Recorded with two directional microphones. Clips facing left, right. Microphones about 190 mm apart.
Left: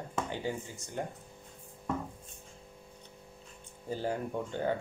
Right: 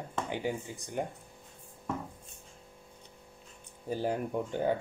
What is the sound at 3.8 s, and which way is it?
Speech, 15° right (ahead or behind).